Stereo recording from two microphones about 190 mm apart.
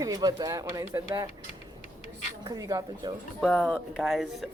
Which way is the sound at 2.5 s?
20° right (ahead or behind).